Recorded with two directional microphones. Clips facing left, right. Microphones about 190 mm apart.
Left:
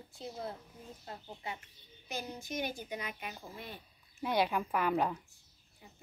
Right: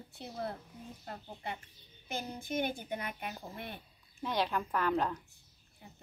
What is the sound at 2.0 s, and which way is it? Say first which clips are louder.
Speech: right 2 dB; 55° right (ahead or behind).